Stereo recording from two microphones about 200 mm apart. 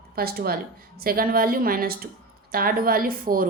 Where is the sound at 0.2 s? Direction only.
50° right (ahead or behind).